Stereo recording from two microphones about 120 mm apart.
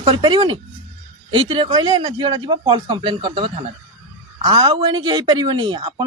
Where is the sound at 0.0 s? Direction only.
40° right (ahead or behind).